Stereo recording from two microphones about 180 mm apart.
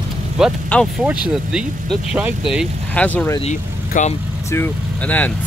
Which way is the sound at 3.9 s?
40° left (ahead or behind).